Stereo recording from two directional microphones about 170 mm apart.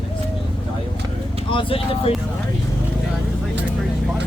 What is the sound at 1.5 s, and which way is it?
Speech, 30° left (ahead or behind).